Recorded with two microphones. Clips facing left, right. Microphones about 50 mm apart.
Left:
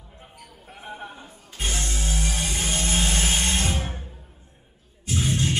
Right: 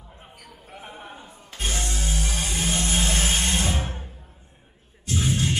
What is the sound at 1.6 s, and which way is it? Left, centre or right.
Music, centre.